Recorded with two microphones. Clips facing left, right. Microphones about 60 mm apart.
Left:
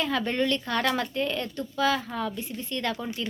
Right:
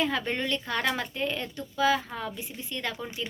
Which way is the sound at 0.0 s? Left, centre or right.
Right.